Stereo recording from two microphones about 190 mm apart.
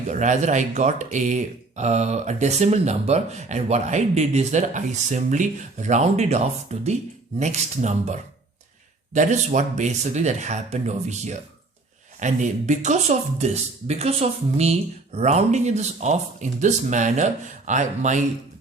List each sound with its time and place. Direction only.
0.1 s speech: 40° right (ahead or behind)